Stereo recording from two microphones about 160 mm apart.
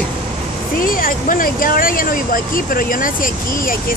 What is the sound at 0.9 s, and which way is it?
Speech, 60° left (ahead or behind).